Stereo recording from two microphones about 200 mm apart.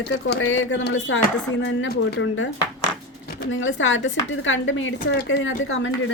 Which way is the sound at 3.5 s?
75° left (ahead or behind).